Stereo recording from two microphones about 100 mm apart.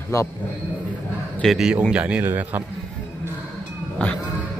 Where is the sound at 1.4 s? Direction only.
5° right (ahead or behind).